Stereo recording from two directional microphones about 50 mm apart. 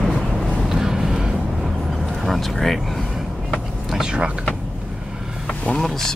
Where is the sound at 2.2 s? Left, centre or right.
Centre.